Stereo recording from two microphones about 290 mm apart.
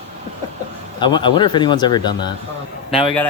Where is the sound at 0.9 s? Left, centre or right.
Centre.